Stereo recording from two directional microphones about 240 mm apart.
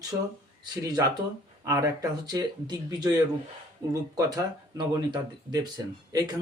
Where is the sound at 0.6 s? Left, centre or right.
Centre.